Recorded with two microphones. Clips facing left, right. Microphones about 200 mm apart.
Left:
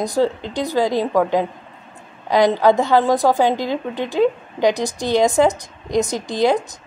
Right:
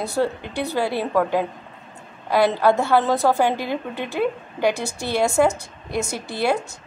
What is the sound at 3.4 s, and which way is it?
A woman's voice, 10° right (ahead or behind).